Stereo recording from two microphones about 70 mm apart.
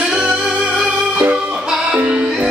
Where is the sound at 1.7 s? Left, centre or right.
Centre.